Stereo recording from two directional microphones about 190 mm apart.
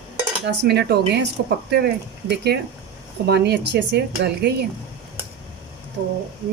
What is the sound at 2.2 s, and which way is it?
Speech, 60° right (ahead or behind).